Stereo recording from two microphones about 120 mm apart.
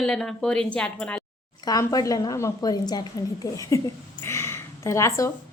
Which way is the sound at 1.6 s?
30° left (ahead or behind).